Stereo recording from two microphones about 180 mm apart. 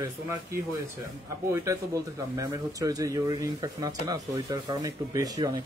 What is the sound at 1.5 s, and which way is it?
Speech, 15° right (ahead or behind).